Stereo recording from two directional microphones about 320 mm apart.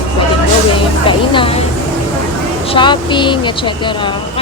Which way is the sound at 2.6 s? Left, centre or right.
Centre.